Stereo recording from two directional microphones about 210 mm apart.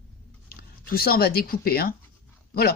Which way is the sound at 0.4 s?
45° left (ahead or behind).